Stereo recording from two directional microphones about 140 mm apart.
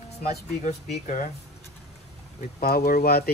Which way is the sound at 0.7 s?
60° left (ahead or behind).